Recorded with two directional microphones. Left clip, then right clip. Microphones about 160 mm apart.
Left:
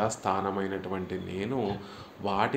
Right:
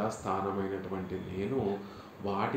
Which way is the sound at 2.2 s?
45° left (ahead or behind).